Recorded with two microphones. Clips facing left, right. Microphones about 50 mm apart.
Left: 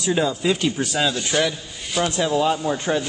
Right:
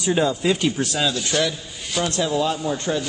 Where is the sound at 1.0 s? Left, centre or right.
Centre.